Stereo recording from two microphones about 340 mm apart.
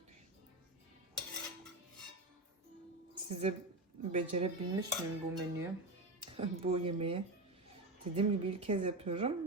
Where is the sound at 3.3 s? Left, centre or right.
Centre.